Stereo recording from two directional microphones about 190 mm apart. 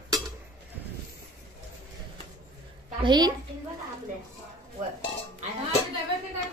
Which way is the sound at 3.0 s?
25° right (ahead or behind).